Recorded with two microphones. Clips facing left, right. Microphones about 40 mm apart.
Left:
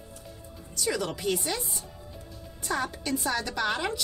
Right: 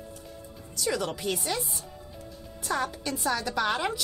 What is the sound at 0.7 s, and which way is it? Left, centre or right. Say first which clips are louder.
Speech: even; centre.